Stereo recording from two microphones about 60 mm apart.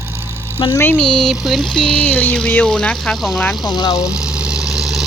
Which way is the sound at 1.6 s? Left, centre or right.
Centre.